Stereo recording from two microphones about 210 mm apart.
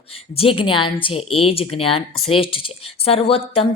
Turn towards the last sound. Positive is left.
turn(degrees=25)  # may be behind; listen again after turning